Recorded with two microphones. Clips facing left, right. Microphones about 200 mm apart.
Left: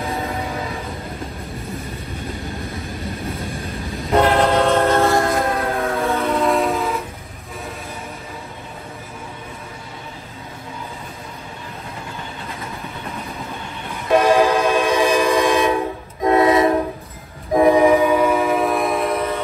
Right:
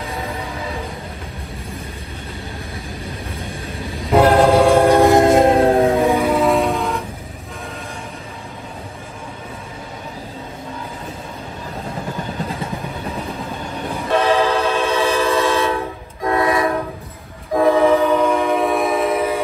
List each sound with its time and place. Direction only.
4.0 s train: centre (ahead or behind); by 5.9 s 30° right (ahead or behind)
5.9 s train: 15° right (ahead or behind)
14.1 s train: 10° left (ahead or behind); by 19.4 s 5° right (ahead or behind)